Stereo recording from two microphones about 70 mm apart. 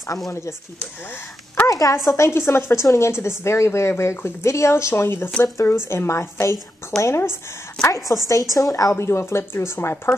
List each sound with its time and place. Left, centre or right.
0.3 s a woman's voice: left
1.7 s a sound: left
2.0 s a woman's voice: left
8.9 s a woman's voice: left